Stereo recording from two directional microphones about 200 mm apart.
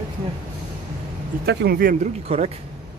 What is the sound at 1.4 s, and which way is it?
Speech, 50° right (ahead or behind).